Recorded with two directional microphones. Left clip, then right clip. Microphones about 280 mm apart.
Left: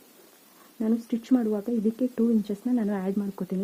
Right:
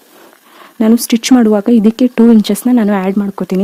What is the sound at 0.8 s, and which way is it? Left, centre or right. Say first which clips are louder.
Speech: right 17 dB; right.